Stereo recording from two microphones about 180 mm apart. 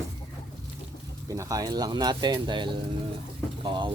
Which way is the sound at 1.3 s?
15° right (ahead or behind).